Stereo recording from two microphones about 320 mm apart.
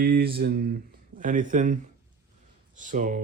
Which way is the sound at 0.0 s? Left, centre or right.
Right.